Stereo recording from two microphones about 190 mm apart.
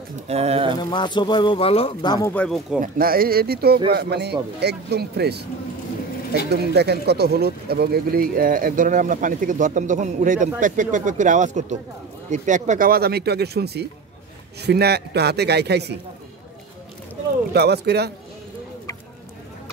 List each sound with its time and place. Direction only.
0.3 s speech: 30° right (ahead or behind)
0.7 s a man's voice: 25° left (ahead or behind)
2.3 s speech: 5° left (ahead or behind)
2.8 s speech: 50° right (ahead or behind)
6.5 s speech: 60° right (ahead or behind)
17.5 s speech: 60° right (ahead or behind)